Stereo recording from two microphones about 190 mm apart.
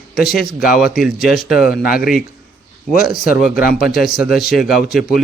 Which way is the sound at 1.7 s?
50° left (ahead or behind).